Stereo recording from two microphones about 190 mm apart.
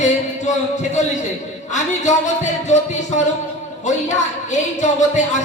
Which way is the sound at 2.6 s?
40° left (ahead or behind).